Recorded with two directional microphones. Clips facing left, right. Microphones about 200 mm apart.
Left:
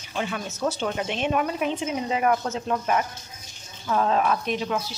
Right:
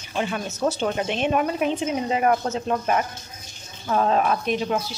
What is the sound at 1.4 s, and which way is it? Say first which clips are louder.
Speech: right 3 dB; 45° right (ahead or behind).